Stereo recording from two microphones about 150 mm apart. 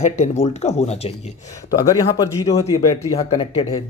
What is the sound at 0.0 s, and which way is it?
Speech, 50° left (ahead or behind).